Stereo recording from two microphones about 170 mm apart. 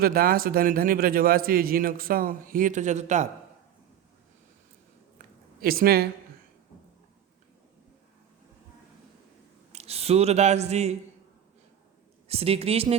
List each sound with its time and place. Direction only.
0.0 s a man's voice: 60° right (ahead or behind); by 3.2 s 45° right (ahead or behind)
5.1 s a sound: 60° right (ahead or behind)
9.7 s speech: 35° right (ahead or behind)
12.3 s a woman's voice: 35° right (ahead or behind)